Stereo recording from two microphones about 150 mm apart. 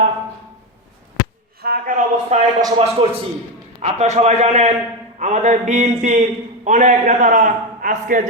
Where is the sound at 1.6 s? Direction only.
90° right.